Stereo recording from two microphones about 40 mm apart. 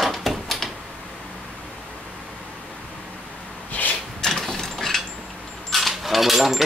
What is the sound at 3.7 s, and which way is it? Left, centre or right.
Rub, left.